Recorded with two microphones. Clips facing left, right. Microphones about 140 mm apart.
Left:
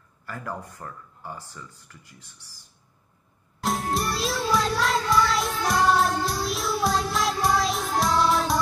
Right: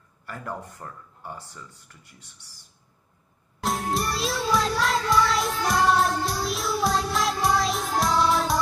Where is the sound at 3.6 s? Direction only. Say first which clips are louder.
Even; centre (ahead or behind).